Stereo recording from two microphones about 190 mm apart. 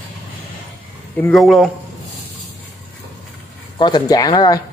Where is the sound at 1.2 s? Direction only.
Centre (ahead or behind).